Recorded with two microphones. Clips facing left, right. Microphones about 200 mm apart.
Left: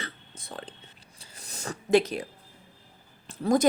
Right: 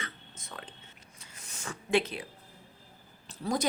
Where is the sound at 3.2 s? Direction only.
50° left (ahead or behind).